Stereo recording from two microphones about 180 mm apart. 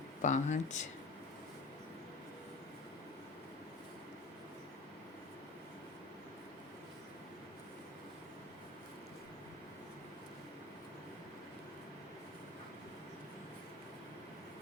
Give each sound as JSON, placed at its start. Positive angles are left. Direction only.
{"t": 0.2, "sound": "speech", "side_deg": 40}